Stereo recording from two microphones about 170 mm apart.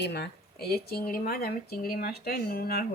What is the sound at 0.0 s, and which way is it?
Speech, 80° left.